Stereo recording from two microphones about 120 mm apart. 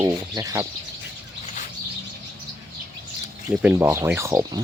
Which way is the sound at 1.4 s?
90° left.